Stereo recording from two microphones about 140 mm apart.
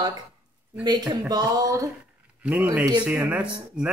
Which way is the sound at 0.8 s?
30° right (ahead or behind).